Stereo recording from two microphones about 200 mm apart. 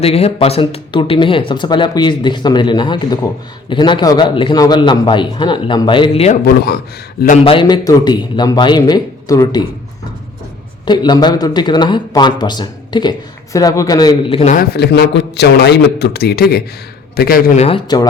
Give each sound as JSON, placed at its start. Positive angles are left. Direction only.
{"t": 0.0, "sound": "speech", "side_deg": 30}
{"t": 7.4, "sound": "speech", "side_deg": 25}
{"t": 10.8, "sound": "speech", "side_deg": 20}
{"t": 14.5, "sound": "a man's voice", "side_deg": 50}
{"t": 17.6, "sound": "speech", "side_deg": 25}